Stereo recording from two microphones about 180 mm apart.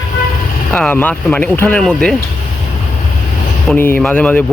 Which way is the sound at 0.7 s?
5° left (ahead or behind).